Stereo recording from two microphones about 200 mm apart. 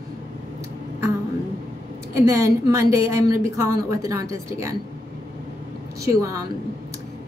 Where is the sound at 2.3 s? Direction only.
15° right (ahead or behind).